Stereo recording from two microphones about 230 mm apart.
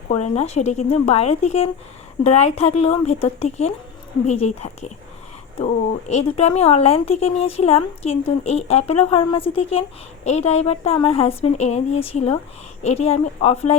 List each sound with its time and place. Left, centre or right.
0.3 s speech: left